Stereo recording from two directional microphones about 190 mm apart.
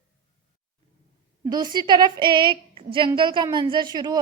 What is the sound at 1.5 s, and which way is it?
A woman's voice, 20° right (ahead or behind).